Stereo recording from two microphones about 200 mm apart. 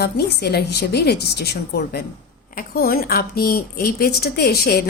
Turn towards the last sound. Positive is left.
turn(degrees=50)  # may be behind; listen again after turning